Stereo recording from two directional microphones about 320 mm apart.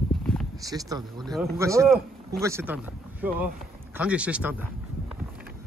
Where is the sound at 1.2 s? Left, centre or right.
Centre.